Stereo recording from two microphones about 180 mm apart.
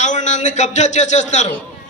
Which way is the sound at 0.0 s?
40° left (ahead or behind).